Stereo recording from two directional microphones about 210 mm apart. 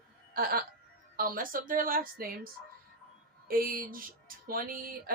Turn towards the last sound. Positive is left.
turn(degrees=-45)  # may be behind; listen again after turning